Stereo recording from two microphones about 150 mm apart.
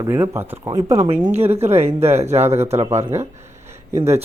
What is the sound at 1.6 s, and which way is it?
Speech, 45° right (ahead or behind).